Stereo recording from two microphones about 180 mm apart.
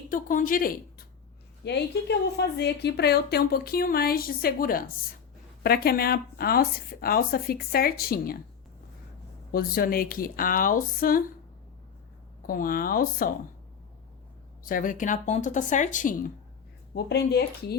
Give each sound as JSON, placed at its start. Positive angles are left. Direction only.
{"t": 0.1, "sound": "a woman's voice", "side_deg": 50}
{"t": 1.6, "sound": "a woman's voice", "side_deg": 70}
{"t": 9.5, "sound": "speech", "side_deg": 55}
{"t": 12.4, "sound": "speech", "side_deg": 50}
{"t": 14.6, "sound": "speech", "side_deg": 50}
{"t": 16.9, "sound": "a woman's voice", "side_deg": 65}